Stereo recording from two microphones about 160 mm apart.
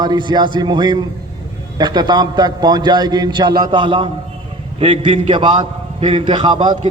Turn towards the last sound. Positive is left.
turn(degrees=-30)  # may be behind; listen again after turning